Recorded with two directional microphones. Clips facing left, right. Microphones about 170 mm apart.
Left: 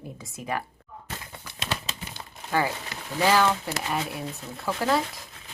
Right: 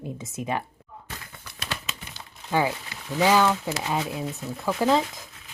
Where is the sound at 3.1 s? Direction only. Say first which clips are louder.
Right 2 dB; 15° right (ahead or behind).